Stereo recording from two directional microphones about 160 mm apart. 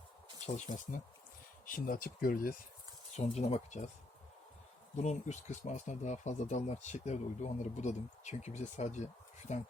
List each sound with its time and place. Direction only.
0.4 s speech: 45° left (ahead or behind)
1.6 s speech: 60° left (ahead or behind)
3.2 s speech: 45° left (ahead or behind)
4.9 s speech: 45° left (ahead or behind)